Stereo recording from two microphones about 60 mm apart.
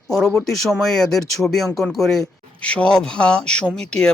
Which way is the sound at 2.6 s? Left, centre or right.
Centre.